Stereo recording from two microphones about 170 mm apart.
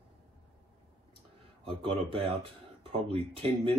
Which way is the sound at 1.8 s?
35° right (ahead or behind).